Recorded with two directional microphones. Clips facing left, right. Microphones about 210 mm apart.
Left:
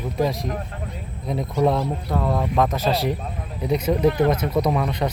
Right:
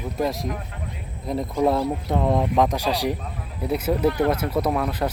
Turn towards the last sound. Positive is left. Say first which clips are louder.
# left 1 dB
turn(degrees=-5)  # may be behind; listen again after turning